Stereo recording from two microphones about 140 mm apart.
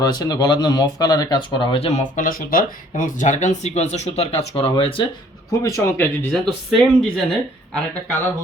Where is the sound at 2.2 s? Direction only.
80° left; by 4.9 s 45° left (ahead or behind).